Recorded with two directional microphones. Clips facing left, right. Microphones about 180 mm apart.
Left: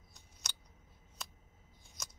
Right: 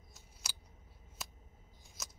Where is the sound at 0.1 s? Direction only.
5° right (ahead or behind).